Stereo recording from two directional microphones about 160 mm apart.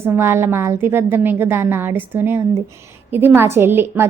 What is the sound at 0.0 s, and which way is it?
A woman's voice, 15° right (ahead or behind).